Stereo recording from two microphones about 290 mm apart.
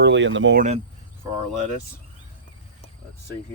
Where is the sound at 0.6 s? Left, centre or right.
Right.